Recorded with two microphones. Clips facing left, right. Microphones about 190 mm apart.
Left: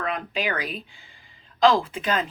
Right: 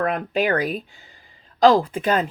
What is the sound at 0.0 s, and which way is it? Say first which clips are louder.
Speech: right 6 dB; 50° right (ahead or behind).